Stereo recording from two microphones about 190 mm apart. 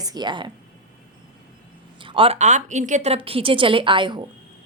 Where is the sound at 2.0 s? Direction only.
30° right (ahead or behind).